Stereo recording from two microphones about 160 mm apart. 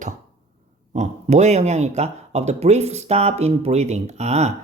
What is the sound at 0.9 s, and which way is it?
Speech, 45° right (ahead or behind).